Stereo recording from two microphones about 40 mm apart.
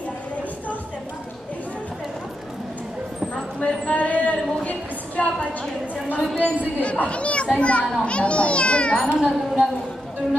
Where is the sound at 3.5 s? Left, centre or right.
Left.